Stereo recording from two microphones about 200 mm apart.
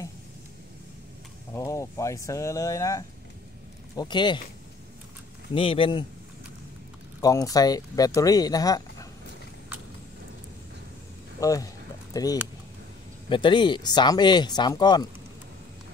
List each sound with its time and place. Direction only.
1.5 s speech: 15° left (ahead or behind)
5.5 s speech: 25° left (ahead or behind)
7.2 s speech: 20° left (ahead or behind)
11.3 s a sound: 15° left (ahead or behind)
13.3 s speech: 25° left (ahead or behind)